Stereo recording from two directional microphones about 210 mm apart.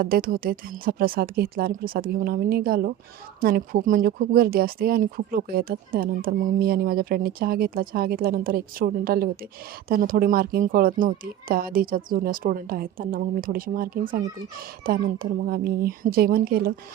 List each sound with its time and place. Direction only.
0.0 s speech: 45° right (ahead or behind)